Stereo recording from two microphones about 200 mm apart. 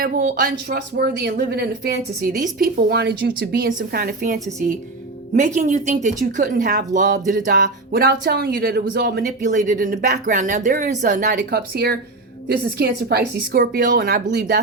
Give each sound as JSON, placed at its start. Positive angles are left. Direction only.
{"t": 0.0, "sound": "speech", "side_deg": -45}